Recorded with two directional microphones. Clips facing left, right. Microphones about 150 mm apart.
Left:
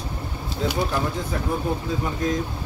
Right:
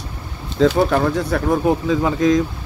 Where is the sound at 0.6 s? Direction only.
75° right (ahead or behind).